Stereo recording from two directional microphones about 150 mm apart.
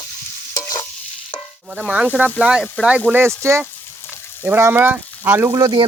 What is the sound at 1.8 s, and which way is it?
Speech, 5° right (ahead or behind).